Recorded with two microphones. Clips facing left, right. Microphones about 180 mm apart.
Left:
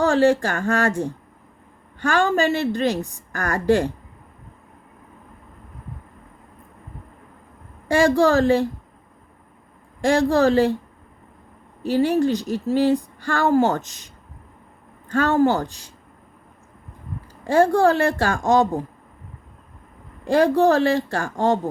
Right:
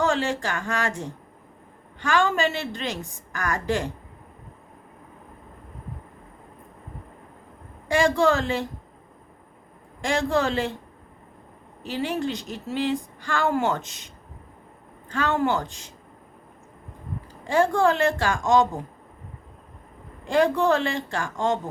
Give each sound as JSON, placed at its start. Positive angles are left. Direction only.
{"t": 0.4, "sound": "a woman's voice", "side_deg": 45}
{"t": 7.9, "sound": "speech", "side_deg": 40}
{"t": 10.1, "sound": "speech", "side_deg": 40}
{"t": 11.8, "sound": "speech", "side_deg": 40}
{"t": 15.1, "sound": "speech", "side_deg": 45}
{"t": 17.5, "sound": "speech", "side_deg": 40}
{"t": 20.2, "sound": "speech", "side_deg": 40}